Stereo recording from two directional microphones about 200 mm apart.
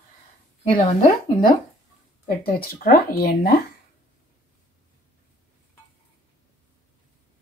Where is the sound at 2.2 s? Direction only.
45° left (ahead or behind).